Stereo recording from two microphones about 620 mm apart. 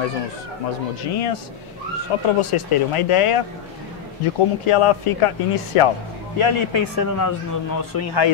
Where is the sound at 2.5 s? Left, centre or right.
Left.